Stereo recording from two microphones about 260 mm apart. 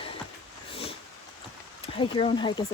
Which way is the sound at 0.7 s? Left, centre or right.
Left.